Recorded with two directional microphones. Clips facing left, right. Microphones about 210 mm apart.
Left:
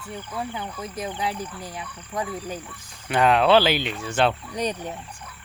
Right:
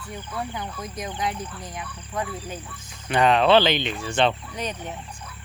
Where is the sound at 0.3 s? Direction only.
10° left (ahead or behind).